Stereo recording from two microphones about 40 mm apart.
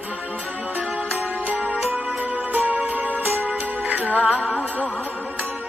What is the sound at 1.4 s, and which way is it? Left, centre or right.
Music, right.